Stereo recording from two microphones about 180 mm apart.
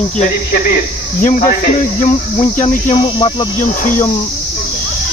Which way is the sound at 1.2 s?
45° left (ahead or behind).